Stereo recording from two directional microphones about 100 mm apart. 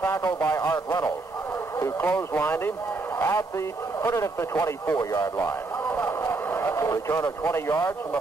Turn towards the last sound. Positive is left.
turn(degrees=25)  # may be behind; listen again after turning